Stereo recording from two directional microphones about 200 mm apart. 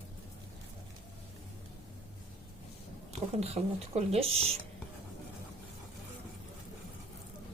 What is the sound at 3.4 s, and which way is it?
Speech, 30° right (ahead or behind).